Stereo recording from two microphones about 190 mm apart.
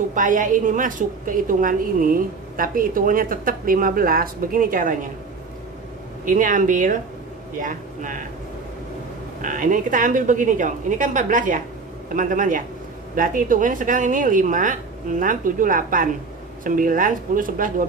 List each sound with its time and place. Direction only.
0.1 s a woman's voice: 45° right (ahead or behind)
6.2 s a woman's voice: 45° right (ahead or behind)
9.4 s a woman's voice: 45° right (ahead or behind)